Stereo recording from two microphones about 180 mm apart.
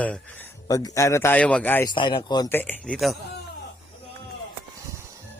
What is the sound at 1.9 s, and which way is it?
Speech, 25° left (ahead or behind).